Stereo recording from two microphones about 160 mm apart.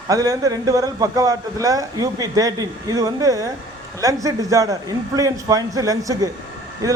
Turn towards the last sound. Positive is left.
turn(degrees=-20)  # may be behind; listen again after turning